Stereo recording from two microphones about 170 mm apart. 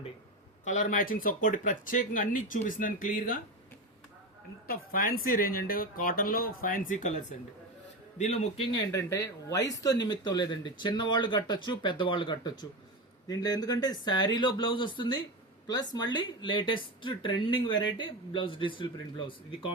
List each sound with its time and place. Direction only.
0.6 s speech: 45° left (ahead or behind)
4.6 s a man's voice: 55° left (ahead or behind); by 8.6 s 40° left (ahead or behind)
8.7 s speech: 20° left (ahead or behind)